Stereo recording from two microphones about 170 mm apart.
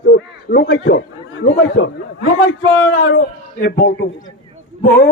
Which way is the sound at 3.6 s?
70° left (ahead or behind).